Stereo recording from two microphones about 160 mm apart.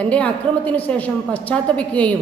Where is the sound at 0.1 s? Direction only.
10° left (ahead or behind).